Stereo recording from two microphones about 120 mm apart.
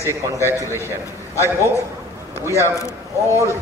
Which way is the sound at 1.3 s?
25° left (ahead or behind).